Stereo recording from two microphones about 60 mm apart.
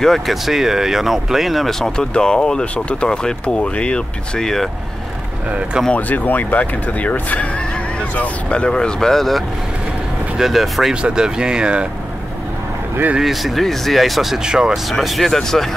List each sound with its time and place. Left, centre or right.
0.0 s speech: centre
5.9 s speech: left; by 11.0 s centre
11.0 s speech: centre
13.2 s speech: centre
14.9 s speech: centre